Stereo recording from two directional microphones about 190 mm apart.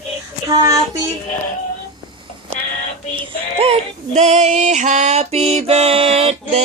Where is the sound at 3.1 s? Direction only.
30° right (ahead or behind).